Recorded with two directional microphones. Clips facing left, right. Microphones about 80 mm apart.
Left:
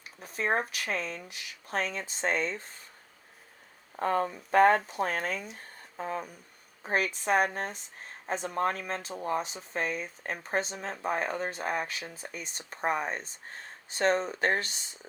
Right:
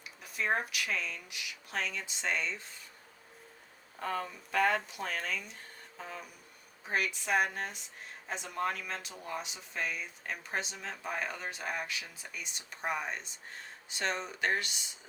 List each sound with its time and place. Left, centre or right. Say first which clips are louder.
0.0 s speech: left 3 dB; left
3.9 s speech: left 8 dB; left